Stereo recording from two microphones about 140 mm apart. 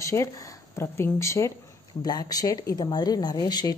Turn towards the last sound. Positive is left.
turn(degrees=30)  # may be behind; listen again after turning